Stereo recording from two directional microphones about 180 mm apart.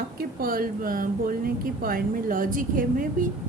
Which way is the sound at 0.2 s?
55° right (ahead or behind).